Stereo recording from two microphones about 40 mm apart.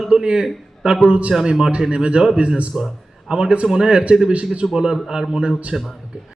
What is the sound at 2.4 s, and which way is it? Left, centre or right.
A man's voice, right.